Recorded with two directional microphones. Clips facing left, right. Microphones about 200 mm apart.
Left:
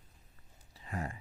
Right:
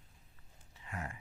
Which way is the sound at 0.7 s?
35° left (ahead or behind).